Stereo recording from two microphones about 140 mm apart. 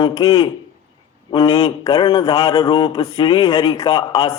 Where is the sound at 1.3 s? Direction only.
40° left (ahead or behind).